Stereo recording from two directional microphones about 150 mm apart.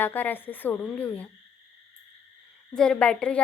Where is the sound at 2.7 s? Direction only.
5° left (ahead or behind).